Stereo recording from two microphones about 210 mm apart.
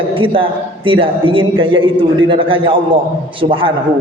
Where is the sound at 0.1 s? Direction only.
25° right (ahead or behind).